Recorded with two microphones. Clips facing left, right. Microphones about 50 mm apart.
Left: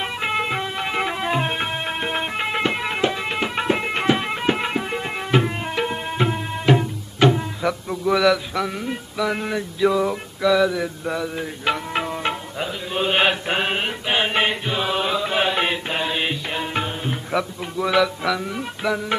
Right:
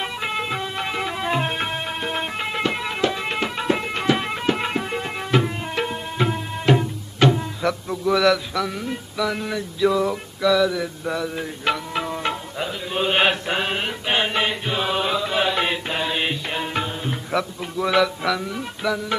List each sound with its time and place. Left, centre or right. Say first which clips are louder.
0.0 s music: left 2 dB; centre
3.1 s music: left 1 dB; centre
3.6 s music: left 1 dB; centre
4.1 s music: even; centre
5.9 s tabla: left 1 dB; centre
6.6 s music: even; centre
12.6 s a man's voice: even; centre
13.5 s music: left 1 dB; centre
14.7 s chant: even; centre
15.2 s music: left 1 dB; centre